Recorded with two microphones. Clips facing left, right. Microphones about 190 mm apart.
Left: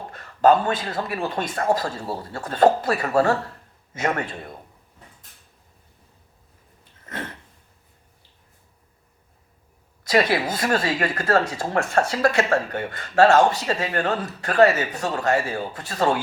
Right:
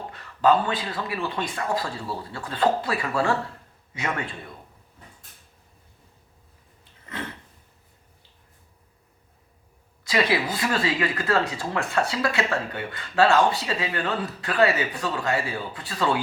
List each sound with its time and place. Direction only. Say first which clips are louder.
0.1 s speech: left 3 dB; 45° left (ahead or behind)
7.0 s a sound: left 1 dB; 45° left (ahead or behind)
10.0 s speech: left 3 dB; 45° left (ahead or behind)